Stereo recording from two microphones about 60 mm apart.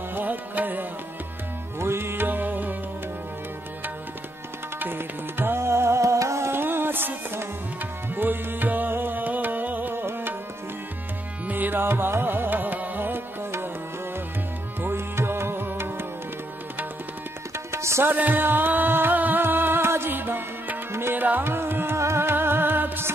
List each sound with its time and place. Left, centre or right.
0.1 s music: right
1.8 s music: right
4.7 s tabla: right
6.5 s music: right
11.4 s music: right
14.8 s music: right
17.6 s tabla: right
18.0 s music: right
21.9 s music: right